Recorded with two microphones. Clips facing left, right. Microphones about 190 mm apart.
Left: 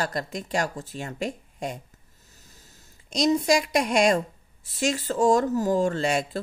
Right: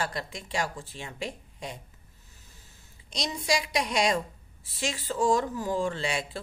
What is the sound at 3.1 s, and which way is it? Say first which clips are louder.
Speech: left 9 dB; 45° left (ahead or behind).